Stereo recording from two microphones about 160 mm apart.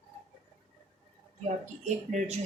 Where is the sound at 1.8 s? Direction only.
45° right (ahead or behind).